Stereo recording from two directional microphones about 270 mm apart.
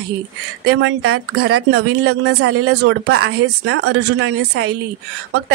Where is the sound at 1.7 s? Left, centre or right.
Right.